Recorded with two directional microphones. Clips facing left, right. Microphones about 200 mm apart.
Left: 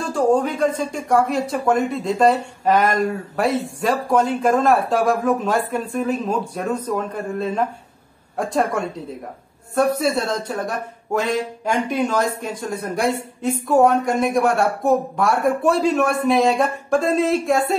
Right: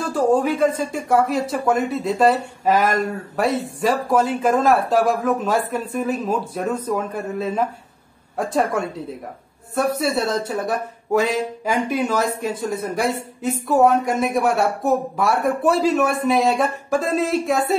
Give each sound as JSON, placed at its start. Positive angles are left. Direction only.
{"t": 0.0, "sound": "speech", "side_deg": -5}